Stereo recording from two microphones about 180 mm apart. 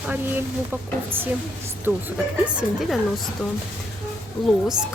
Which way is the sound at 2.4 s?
5° right (ahead or behind).